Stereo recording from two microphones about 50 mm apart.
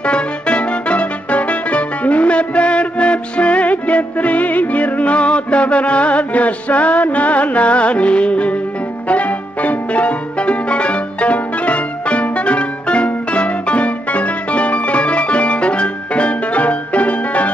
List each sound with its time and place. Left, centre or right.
0.0 s music: left